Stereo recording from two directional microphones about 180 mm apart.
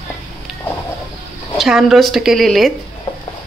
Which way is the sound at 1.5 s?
Centre (ahead or behind).